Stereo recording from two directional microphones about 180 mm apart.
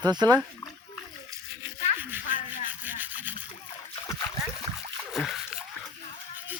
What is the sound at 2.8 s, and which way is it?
Toothbrush, 10° right (ahead or behind).